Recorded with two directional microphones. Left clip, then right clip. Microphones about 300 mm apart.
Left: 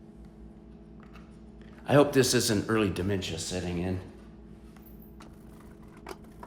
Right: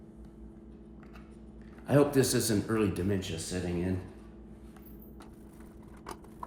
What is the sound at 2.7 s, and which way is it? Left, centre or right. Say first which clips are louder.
Speech: left 3 dB; centre.